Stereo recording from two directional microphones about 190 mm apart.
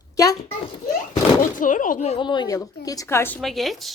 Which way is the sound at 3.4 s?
Centre (ahead or behind).